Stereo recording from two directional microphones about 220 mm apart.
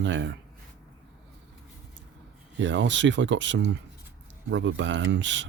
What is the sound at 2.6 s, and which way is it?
Speech, 55° right (ahead or behind).